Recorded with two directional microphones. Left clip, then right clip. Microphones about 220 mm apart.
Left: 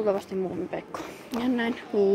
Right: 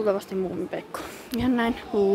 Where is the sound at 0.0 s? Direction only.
15° right (ahead or behind).